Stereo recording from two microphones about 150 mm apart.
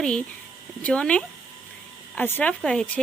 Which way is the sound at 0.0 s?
5° left (ahead or behind).